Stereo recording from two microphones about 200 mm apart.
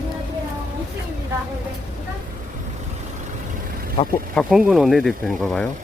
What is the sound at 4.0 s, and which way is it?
Speech, 30° left (ahead or behind).